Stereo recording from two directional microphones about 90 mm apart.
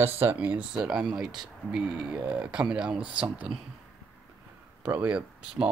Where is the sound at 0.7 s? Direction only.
5° right (ahead or behind).